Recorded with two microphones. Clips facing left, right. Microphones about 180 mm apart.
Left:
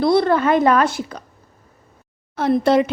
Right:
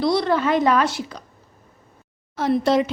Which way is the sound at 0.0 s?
55° left (ahead or behind).